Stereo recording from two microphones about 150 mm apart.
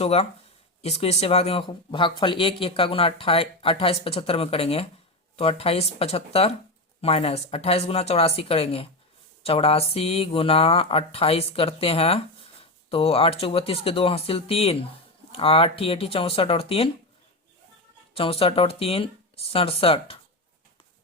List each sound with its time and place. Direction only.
0.0 s speech: 45° left (ahead or behind)
18.1 s speech: 40° left (ahead or behind)